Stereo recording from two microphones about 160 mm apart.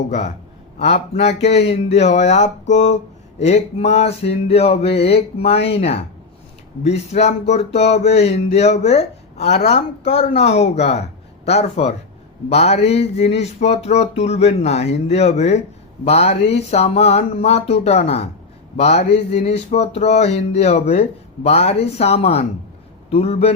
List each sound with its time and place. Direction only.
0.1 s speech: 45° left (ahead or behind)